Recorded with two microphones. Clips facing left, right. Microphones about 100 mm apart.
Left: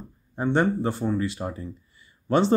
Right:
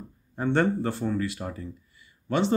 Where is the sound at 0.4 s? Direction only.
15° left (ahead or behind).